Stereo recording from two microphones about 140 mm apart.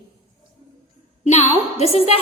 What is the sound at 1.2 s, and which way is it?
Speech, 55° left (ahead or behind).